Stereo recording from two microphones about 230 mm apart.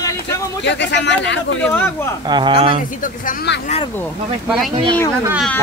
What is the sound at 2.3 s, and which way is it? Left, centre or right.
Speech, right.